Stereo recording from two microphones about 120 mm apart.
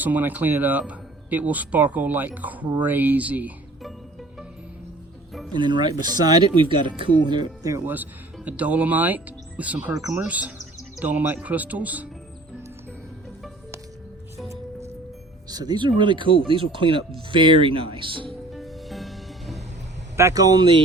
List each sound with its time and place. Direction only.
0.0 s a man's voice: 15° right (ahead or behind)
5.5 s speech: 40° right (ahead or behind)
8.4 s a man's voice: 10° right (ahead or behind)
15.4 s speech: 35° right (ahead or behind)
18.5 s music: centre (ahead or behind)
20.1 s speech: 25° right (ahead or behind); by 20.8 s 40° right (ahead or behind)